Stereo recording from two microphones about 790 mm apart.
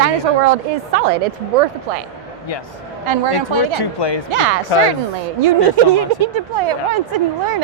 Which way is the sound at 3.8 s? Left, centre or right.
Left.